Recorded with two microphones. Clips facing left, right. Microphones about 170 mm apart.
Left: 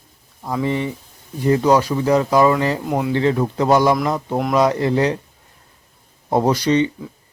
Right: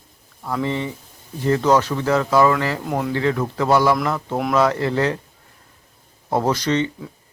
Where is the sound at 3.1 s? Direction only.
25° left (ahead or behind).